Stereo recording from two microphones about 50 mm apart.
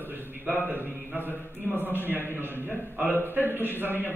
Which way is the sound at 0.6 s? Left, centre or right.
Right.